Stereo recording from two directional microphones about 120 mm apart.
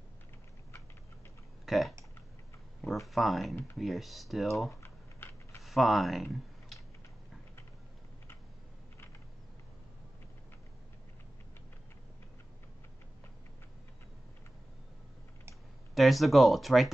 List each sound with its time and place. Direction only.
1.7 s speech: centre (ahead or behind)
3.1 s speech: centre (ahead or behind)
4.8 s typing: 20° left (ahead or behind)
5.6 s speech: centre (ahead or behind)
15.9 s speech: centre (ahead or behind)